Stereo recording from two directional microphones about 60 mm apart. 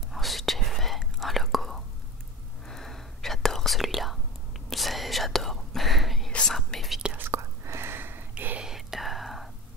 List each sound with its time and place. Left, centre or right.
0.1 s whispering: centre
7.2 s whispering: right
8.5 s whispering: centre